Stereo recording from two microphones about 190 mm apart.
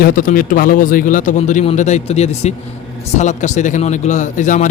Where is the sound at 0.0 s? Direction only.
45° left (ahead or behind).